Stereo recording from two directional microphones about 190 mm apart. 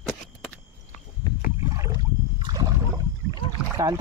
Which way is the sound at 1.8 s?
20° right (ahead or behind).